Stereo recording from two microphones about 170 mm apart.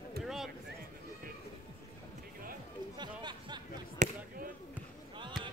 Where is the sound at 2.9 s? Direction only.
25° right (ahead or behind).